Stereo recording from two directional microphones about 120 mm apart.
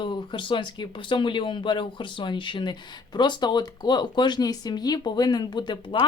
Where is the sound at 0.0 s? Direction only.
40° left (ahead or behind).